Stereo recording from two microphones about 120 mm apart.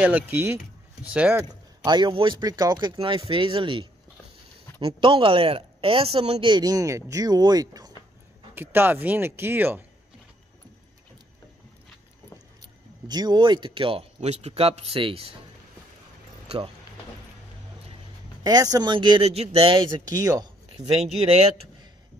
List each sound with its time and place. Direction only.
0.0 s speech: 15° right (ahead or behind)
1.9 s speech: 40° right (ahead or behind)
3.3 s speech: 45° right (ahead or behind)
6.5 s speech: 30° right (ahead or behind)
8.5 s speech: 15° right (ahead or behind)
13.1 s speech: 35° right (ahead or behind)
16.5 s speech: 55° right (ahead or behind)
18.4 s speech: 30° right (ahead or behind)
19.2 s speech: 60° right (ahead or behind)
20.1 s speech: 30° right (ahead or behind)
20.7 s speech: 60° right (ahead or behind)